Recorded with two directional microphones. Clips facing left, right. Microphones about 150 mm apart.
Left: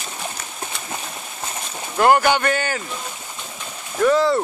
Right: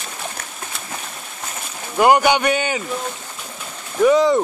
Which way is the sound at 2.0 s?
15° right (ahead or behind).